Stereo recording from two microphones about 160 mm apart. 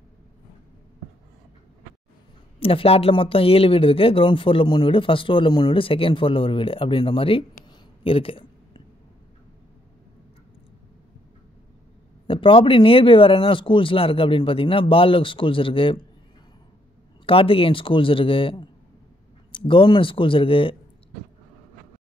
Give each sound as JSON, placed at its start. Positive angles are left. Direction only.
{"t": 2.6, "sound": "speech", "side_deg": 35}
{"t": 8.0, "sound": "a sound", "side_deg": 35}
{"t": 12.3, "sound": "speech", "side_deg": 35}
{"t": 17.3, "sound": "speech", "side_deg": 35}